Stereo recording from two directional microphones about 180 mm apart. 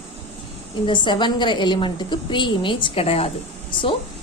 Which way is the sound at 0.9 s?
25° left (ahead or behind).